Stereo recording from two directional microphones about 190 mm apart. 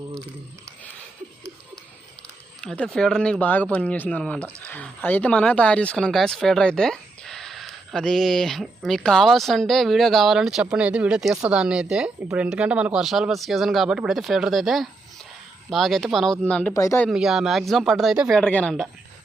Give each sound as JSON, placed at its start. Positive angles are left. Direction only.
{"t": 2.6, "sound": "speech", "side_deg": 5}
{"t": 17.1, "sound": "speech", "side_deg": 0}